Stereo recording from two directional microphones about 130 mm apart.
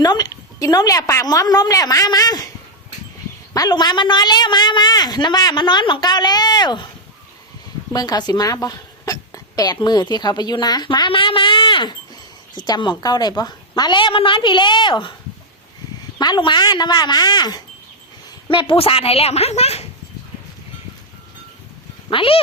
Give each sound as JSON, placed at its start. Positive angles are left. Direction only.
{"t": 0.0, "sound": "a woman's voice", "side_deg": 30}
{"t": 3.5, "sound": "speech", "side_deg": 30}
{"t": 7.9, "sound": "speech", "side_deg": 30}
{"t": 16.1, "sound": "speech", "side_deg": 35}
{"t": 18.5, "sound": "a woman's voice", "side_deg": 45}
{"t": 22.1, "sound": "a woman's voice", "side_deg": 45}